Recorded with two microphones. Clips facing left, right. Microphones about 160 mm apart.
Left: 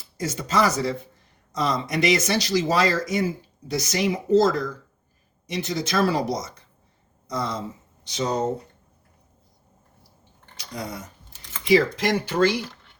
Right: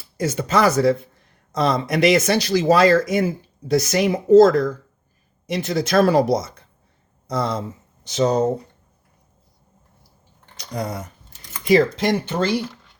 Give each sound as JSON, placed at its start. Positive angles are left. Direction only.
{"t": 0.2, "sound": "speech", "side_deg": -60}
{"t": 10.6, "sound": "speech", "side_deg": -50}
{"t": 11.9, "sound": "speech", "side_deg": -30}